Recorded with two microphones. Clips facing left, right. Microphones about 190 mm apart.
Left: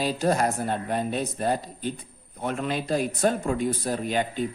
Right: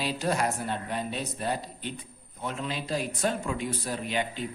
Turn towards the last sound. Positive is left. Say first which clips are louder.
# left 5 dB
turn(degrees=45)  # may be behind; listen again after turning